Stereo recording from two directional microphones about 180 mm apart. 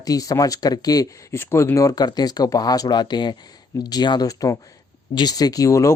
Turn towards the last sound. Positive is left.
turn(degrees=15)  # may be behind; listen again after turning